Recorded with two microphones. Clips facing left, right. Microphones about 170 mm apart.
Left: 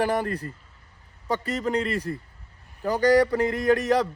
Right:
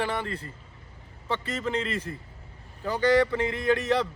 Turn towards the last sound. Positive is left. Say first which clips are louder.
# left 3 dB
turn(degrees=40)  # may be behind; listen again after turning